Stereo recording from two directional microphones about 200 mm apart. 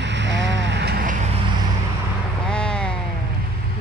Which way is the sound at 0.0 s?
60° right (ahead or behind).